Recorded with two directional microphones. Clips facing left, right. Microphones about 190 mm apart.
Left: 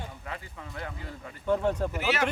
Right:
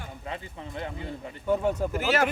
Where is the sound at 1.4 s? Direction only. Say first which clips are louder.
Right 1 dB; 5° right (ahead or behind).